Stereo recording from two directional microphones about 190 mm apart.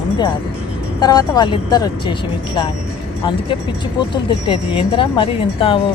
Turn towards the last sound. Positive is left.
turn(degrees=30)  # may be behind; listen again after turning